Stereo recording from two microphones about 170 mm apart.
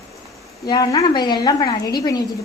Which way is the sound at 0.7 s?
25° left (ahead or behind).